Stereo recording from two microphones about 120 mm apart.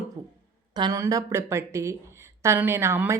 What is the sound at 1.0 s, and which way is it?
A woman's voice, 25° right (ahead or behind).